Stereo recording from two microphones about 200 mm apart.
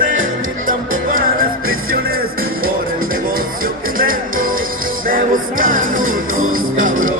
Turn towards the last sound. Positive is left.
turn(degrees=-90)